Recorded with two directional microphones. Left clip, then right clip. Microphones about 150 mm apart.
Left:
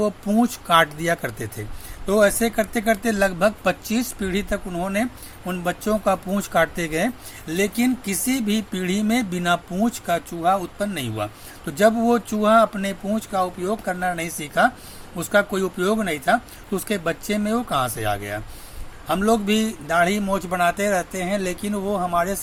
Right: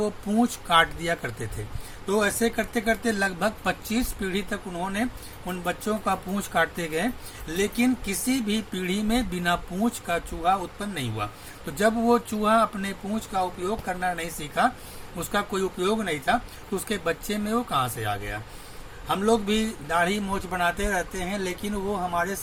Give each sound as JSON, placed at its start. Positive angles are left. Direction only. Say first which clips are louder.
{"t": 0.3, "sound": "speech", "louder": "left 3 dB", "side_deg": 40}